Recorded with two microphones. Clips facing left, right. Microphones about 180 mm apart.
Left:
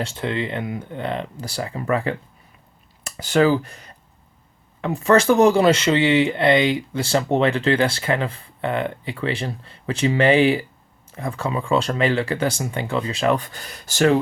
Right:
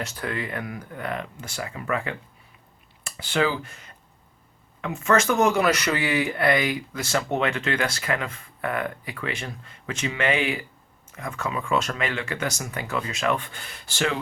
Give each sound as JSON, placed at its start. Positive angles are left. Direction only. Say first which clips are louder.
{"t": 0.0, "sound": "speech", "louder": "left 5 dB", "side_deg": 25}